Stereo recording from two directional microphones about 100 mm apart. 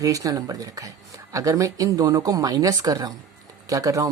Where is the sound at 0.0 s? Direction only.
35° right (ahead or behind).